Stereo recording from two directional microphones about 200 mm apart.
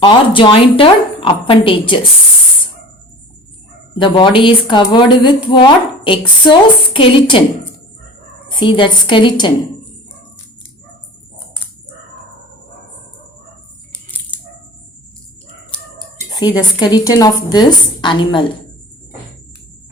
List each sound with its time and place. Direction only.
0.0 s speech: 25° left (ahead or behind)
4.0 s speech: 25° left (ahead or behind)
8.4 s speech: 25° left (ahead or behind)
16.3 s speech: 20° left (ahead or behind)